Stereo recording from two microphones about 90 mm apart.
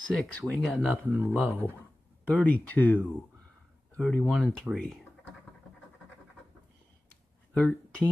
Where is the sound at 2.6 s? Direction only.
15° left (ahead or behind).